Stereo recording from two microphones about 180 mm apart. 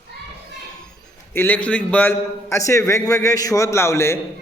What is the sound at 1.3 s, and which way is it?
A man's voice, 10° left (ahead or behind).